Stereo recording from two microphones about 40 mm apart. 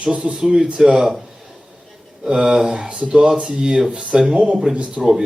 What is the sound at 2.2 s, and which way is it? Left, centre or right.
Speech, centre.